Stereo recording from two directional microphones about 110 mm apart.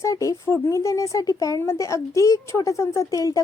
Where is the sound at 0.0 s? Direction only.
30° left (ahead or behind).